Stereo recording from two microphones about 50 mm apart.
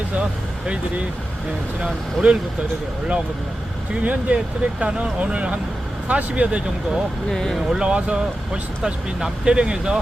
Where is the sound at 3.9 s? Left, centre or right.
Right.